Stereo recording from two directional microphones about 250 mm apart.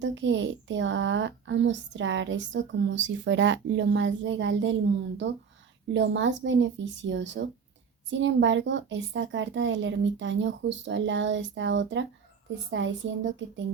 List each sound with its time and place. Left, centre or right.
0.0 s speech: right